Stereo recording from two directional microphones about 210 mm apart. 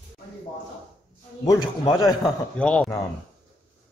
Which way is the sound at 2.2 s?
5° left (ahead or behind).